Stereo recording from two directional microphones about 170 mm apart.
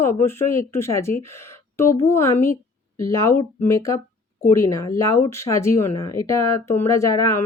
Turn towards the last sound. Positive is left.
turn(degrees=15)  # may be behind; listen again after turning